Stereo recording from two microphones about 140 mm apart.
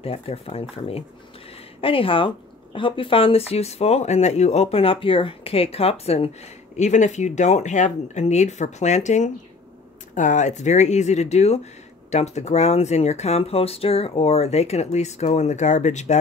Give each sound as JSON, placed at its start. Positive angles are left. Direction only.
{"t": 0.0, "sound": "speech", "side_deg": 45}
{"t": 6.8, "sound": "speech", "side_deg": 55}